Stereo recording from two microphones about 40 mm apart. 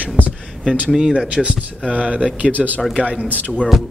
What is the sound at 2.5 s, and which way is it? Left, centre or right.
Speech, right.